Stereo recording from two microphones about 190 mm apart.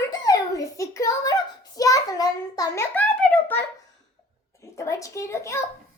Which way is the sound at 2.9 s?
5° left (ahead or behind).